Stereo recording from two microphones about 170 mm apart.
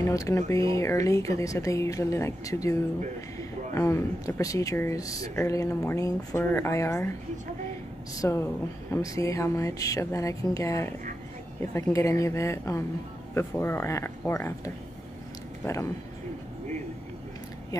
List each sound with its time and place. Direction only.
0.0 s speech: 20° left (ahead or behind)
8.2 s speech: 15° left (ahead or behind)